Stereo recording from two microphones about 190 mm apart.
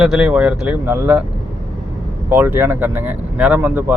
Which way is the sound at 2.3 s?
10° right (ahead or behind).